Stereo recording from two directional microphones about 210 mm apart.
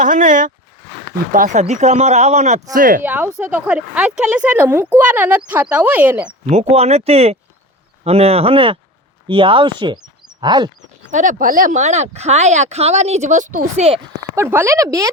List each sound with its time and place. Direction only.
0.0 s speech: 40° right (ahead or behind)
3.0 s speech: 10° right (ahead or behind)
6.4 s speech: 30° right (ahead or behind)
11.1 s speech: 35° right (ahead or behind)
14.3 s speech: 10° right (ahead or behind)